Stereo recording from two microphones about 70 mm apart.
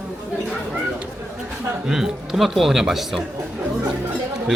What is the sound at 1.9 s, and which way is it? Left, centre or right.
Speech, centre.